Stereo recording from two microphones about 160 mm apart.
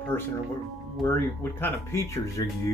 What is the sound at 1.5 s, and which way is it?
Speech, 15° left (ahead or behind).